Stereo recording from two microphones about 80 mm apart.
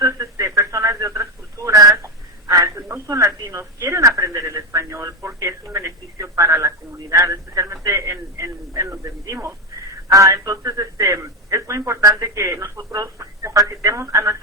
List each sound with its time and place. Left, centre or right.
0.0 s radio: right
2.5 s telephone: right
7.6 s radio: right
8.8 s a sound: right
10.1 s speech: right
12.9 s telephone: right